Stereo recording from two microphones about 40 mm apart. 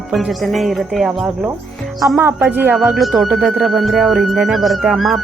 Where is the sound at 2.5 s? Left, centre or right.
Right.